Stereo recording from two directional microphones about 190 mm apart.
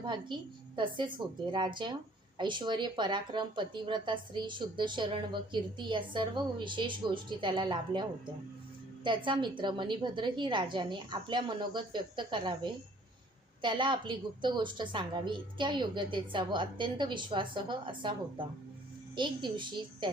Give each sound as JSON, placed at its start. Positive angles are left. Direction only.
{"t": 0.0, "sound": "speech", "side_deg": -25}
{"t": 9.0, "sound": "speech", "side_deg": -25}
{"t": 19.1, "sound": "speech", "side_deg": -25}